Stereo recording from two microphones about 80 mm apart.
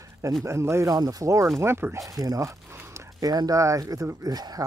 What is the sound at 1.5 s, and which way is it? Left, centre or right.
Speech, right.